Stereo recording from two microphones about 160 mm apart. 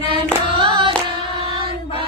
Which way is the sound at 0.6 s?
35° right (ahead or behind).